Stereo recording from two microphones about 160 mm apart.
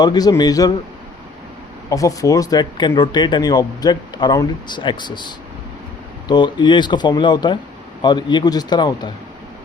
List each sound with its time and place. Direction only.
0.0 s speech: 25° left (ahead or behind)
1.9 s speech: 20° left (ahead or behind)